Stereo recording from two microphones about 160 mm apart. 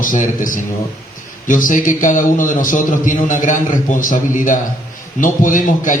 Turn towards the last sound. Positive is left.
turn(degrees=55)  # may be behind; listen again after turning